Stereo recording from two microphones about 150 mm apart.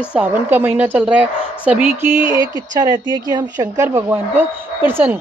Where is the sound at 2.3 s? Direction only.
25° right (ahead or behind).